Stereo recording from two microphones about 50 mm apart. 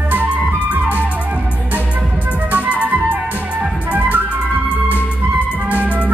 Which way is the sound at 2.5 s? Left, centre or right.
Right.